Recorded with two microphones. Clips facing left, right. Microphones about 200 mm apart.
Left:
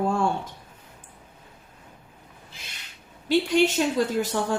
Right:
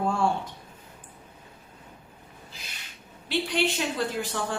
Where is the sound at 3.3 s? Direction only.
45° left (ahead or behind).